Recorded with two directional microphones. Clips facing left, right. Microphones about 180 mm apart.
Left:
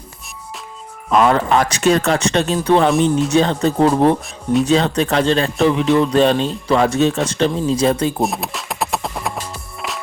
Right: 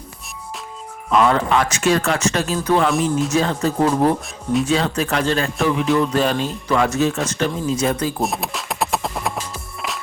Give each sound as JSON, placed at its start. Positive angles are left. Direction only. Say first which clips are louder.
{"t": 1.1, "sound": "a man's voice", "louder": "left 2 dB", "side_deg": 40}
{"t": 8.2, "sound": "music", "louder": "left 2 dB", "side_deg": 0}